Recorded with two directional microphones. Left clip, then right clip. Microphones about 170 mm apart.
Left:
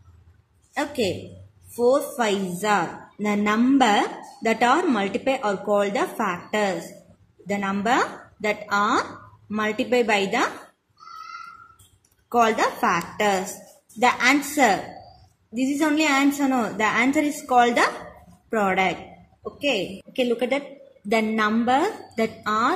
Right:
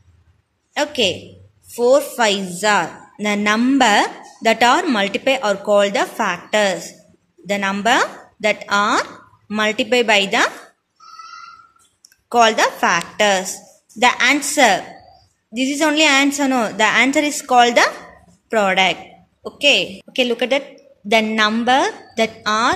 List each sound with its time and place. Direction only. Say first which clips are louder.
0.7 s a sound: right 7 dB; 25° right (ahead or behind)
1.8 s a woman's voice: right 6 dB; 30° right (ahead or behind)
3.5 s a woman's voice: right 4 dB; 45° right (ahead or behind)
12.4 s a woman's voice: right 6 dB; 25° right (ahead or behind)